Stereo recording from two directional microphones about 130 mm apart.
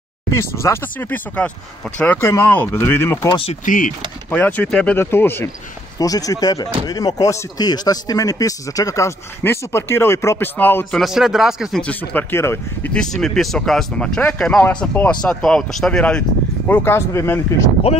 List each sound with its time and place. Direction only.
0.3 s speech: 20° left (ahead or behind)
3.3 s speech: 40° left (ahead or behind)
3.6 s speech: 90° left
4.3 s speech: 10° left (ahead or behind)
5.9 s speech: 30° left (ahead or behind)
10.9 s speech: centre (ahead or behind)
11.8 s speech: 10° left (ahead or behind)
12.9 s speech: 5° left (ahead or behind); by 17.6 s 20° left (ahead or behind)